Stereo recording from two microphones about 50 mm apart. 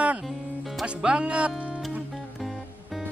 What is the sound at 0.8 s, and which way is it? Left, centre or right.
Music, right.